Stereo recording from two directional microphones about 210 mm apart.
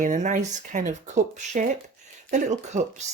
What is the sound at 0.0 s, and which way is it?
Speech, 35° right (ahead or behind).